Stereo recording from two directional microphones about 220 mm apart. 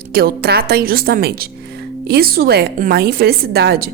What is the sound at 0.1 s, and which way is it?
A woman's voice, 45° right (ahead or behind).